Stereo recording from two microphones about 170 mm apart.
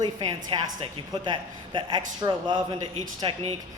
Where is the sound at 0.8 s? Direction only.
25° right (ahead or behind).